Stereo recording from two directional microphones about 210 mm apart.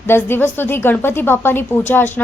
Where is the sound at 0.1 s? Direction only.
10° left (ahead or behind).